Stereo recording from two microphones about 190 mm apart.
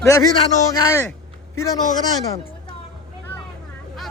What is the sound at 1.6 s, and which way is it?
Speech, 20° left (ahead or behind).